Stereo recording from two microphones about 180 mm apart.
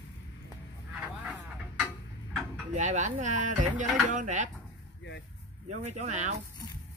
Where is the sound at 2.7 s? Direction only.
40° right (ahead or behind).